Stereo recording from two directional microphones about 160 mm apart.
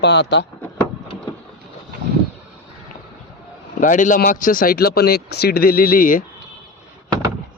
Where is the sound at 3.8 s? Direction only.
55° left (ahead or behind).